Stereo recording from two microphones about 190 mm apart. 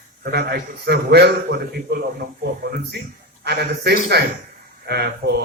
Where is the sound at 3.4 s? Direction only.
60° right (ahead or behind).